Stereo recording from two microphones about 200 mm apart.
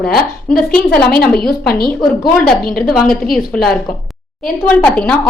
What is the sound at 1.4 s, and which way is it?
A woman's voice, 50° left (ahead or behind).